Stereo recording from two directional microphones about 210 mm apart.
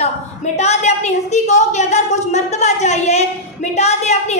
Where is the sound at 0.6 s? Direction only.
30° left (ahead or behind).